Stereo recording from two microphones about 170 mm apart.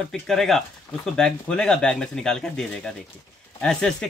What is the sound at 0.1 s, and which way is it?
Speech, centre (ahead or behind).